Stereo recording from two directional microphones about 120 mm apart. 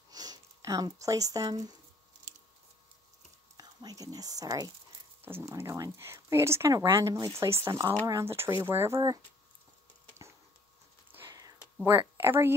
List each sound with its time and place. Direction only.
0.1 s speech: 30° right (ahead or behind)
3.5 s speech: 30° right (ahead or behind)
5.2 s speech: 20° right (ahead or behind)
11.1 s a sound: 20° right (ahead or behind)
11.8 s speech: 20° right (ahead or behind)